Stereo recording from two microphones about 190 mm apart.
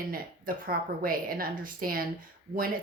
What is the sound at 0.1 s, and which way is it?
Speech, 50° right (ahead or behind).